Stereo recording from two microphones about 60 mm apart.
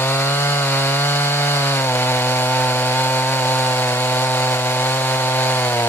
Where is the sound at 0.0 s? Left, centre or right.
Left.